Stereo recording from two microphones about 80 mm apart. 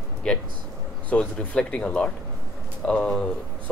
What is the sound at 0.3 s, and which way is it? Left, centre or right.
Speech, centre.